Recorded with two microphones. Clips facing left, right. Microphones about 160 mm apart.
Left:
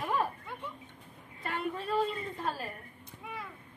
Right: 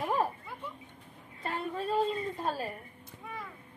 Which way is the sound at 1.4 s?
30° right (ahead or behind).